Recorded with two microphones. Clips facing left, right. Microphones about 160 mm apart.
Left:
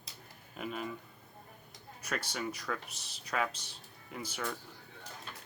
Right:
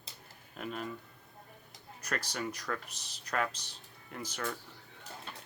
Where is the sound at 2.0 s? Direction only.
5° left (ahead or behind).